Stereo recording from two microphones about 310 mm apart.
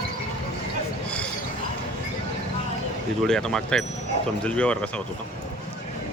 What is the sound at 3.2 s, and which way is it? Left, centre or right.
Speech, centre.